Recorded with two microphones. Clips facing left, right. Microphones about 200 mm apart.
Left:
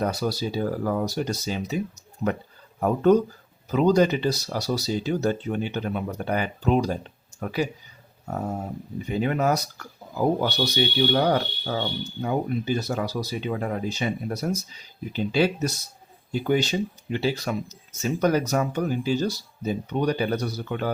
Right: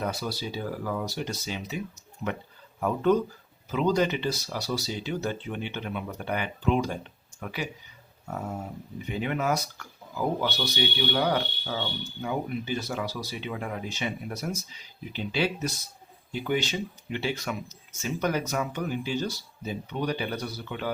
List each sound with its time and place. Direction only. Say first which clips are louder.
0.0 s speech: left 6 dB; 40° left (ahead or behind)
2.8 s speech: left 5 dB; 45° left (ahead or behind)